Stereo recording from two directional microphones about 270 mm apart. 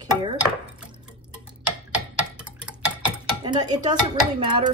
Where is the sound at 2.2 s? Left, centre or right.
Centre.